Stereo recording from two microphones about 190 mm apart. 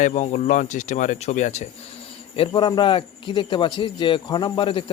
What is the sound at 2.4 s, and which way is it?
A man's voice, 25° left (ahead or behind).